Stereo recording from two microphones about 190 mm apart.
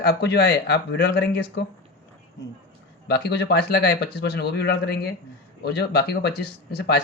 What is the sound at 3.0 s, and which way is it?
Speech, 60° left (ahead or behind).